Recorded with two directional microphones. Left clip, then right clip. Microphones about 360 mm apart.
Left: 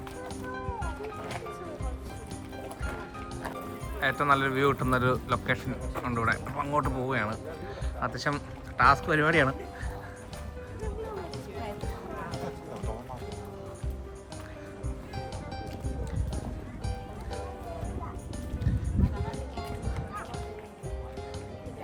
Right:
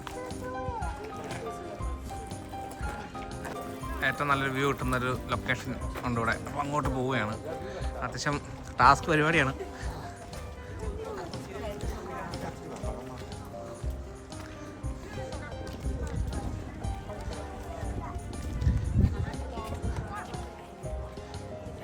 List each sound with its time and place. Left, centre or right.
4.0 s speech: centre